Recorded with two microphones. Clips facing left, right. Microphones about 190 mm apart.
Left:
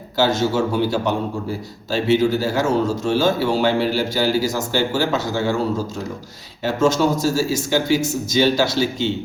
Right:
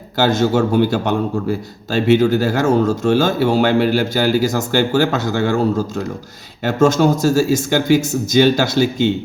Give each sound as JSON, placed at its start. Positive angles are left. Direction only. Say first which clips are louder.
{"t": 0.2, "sound": "a man's voice", "louder": "right 3 dB", "side_deg": -55}
{"t": 2.4, "sound": "a man's voice", "louder": "right 4 dB", "side_deg": -50}
{"t": 6.7, "sound": "a man's voice", "louder": "right 4 dB", "side_deg": -50}